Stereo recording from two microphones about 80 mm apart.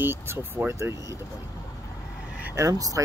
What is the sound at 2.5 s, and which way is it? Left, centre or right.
Speech, right.